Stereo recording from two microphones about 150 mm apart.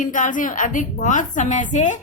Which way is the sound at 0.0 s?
60° left (ahead or behind).